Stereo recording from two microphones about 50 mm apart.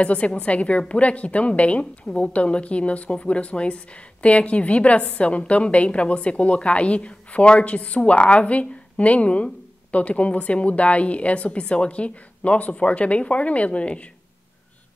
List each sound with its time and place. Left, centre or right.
0.0 s a woman's voice: left